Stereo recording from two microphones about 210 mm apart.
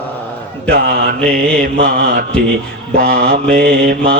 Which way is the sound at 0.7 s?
45° right (ahead or behind).